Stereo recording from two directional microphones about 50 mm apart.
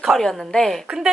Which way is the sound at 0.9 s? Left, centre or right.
Centre.